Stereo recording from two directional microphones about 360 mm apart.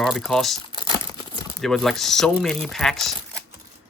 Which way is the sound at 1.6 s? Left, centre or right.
Centre.